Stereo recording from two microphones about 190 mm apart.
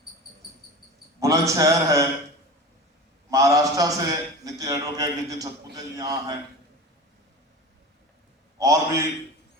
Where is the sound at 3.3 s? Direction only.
15° right (ahead or behind).